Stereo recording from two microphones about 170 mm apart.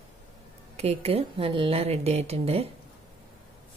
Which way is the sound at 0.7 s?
35° right (ahead or behind).